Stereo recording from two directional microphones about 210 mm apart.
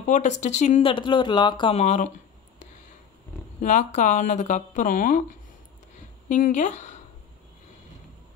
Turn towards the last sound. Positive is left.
turn(degrees=35)  # may be behind; listen again after turning